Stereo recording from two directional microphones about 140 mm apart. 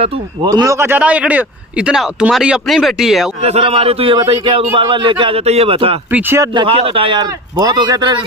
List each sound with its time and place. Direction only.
0.5 s a man's voice: 25° right (ahead or behind); by 3.3 s centre (ahead or behind)
3.4 s a man's voice: 45° right (ahead or behind)
5.4 s a man's voice: 50° right (ahead or behind); by 8.2 s 30° right (ahead or behind)